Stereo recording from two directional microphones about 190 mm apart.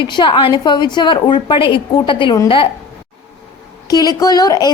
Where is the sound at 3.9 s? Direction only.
20° left (ahead or behind).